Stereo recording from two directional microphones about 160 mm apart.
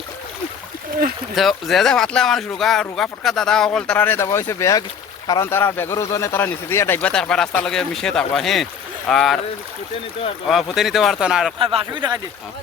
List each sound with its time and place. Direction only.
1.4 s speech: centre (ahead or behind)
10.4 s speech: centre (ahead or behind)
11.6 s speech: 30° right (ahead or behind)